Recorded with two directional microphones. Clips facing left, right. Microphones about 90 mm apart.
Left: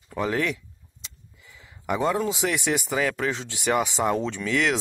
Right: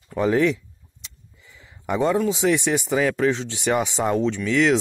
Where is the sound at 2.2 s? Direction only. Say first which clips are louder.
Right 4 dB; 15° left (ahead or behind).